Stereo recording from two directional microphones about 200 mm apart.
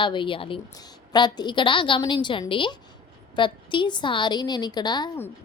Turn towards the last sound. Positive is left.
turn(degrees=20)  # may be behind; listen again after turning